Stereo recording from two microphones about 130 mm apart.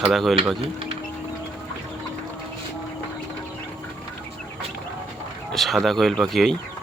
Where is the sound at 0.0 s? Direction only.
Centre (ahead or behind).